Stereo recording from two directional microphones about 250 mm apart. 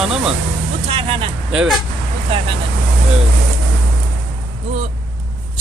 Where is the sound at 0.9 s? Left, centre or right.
Right.